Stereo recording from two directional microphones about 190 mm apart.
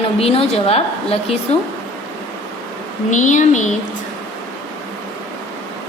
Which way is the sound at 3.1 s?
40° left (ahead or behind).